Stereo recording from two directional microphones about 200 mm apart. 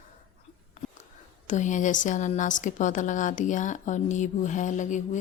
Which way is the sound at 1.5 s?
35° left (ahead or behind).